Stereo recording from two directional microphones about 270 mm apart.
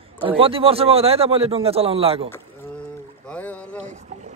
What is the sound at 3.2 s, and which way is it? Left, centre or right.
Speech, centre.